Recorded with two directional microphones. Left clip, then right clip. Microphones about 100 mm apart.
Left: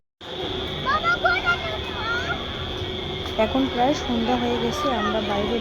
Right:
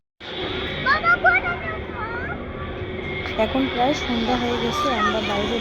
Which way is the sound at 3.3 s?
Centre (ahead or behind).